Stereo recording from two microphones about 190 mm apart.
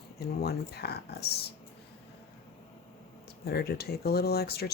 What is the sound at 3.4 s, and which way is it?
Speech, 55° left (ahead or behind).